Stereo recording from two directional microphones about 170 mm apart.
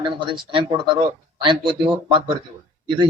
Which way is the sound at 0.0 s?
30° right (ahead or behind).